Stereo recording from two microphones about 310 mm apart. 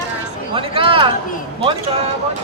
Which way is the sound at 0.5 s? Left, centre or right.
Centre.